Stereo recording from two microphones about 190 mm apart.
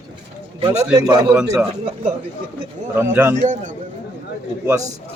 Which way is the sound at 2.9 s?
10° right (ahead or behind).